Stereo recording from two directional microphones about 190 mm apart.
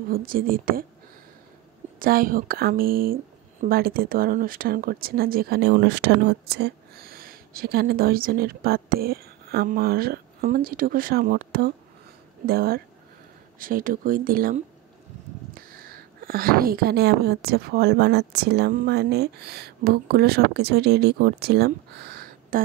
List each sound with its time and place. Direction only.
0.1 s speech: 50° right (ahead or behind)
2.0 s speech: 50° right (ahead or behind)